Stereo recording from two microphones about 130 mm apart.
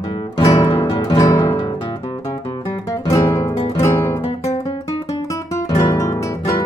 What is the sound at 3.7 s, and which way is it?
Music, 20° left (ahead or behind).